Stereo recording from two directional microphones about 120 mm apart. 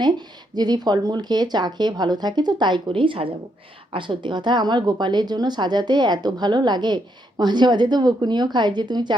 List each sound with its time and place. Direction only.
0.0 s a woman's voice: 35° right (ahead or behind)